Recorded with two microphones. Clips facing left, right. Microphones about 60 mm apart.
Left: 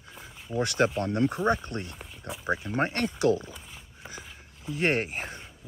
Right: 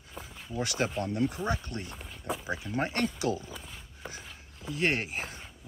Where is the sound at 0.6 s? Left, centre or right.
Left.